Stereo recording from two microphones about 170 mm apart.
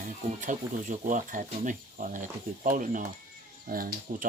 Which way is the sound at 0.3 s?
50° right (ahead or behind).